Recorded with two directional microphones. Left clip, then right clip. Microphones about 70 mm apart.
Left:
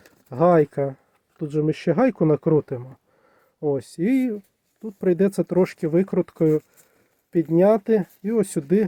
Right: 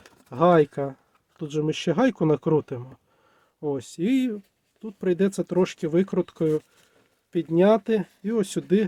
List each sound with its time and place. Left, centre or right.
0.3 s speech: left
3.8 s speech: left